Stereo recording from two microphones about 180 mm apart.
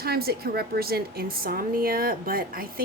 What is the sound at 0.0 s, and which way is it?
A woman's voice, 60° right (ahead or behind).